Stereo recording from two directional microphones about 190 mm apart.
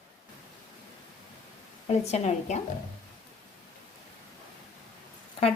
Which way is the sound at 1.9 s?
35° left (ahead or behind).